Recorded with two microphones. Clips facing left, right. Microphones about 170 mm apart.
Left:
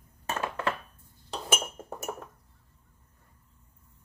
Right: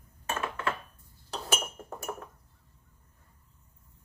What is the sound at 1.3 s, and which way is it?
Chink, 20° left (ahead or behind).